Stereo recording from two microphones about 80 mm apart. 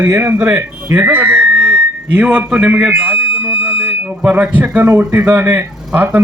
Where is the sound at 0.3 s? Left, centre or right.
Right.